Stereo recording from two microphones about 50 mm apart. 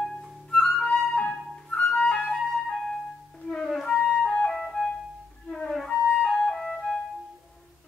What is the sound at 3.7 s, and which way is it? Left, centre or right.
Music, centre.